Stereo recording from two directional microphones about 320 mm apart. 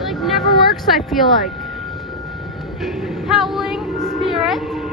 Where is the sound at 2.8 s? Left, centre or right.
Centre.